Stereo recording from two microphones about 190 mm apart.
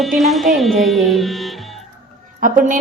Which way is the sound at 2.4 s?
45° right (ahead or behind).